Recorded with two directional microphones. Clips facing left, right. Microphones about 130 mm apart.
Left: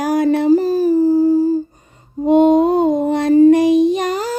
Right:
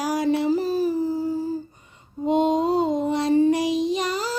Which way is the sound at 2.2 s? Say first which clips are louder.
Left 9 dB; 55° left (ahead or behind).